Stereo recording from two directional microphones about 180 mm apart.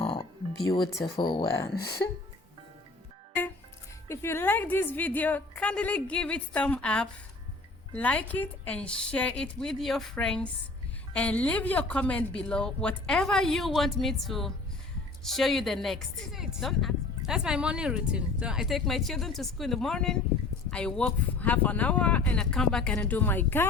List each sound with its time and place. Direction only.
0.6 s speech: 20° left (ahead or behind)
4.1 s a woman's voice: 15° left (ahead or behind)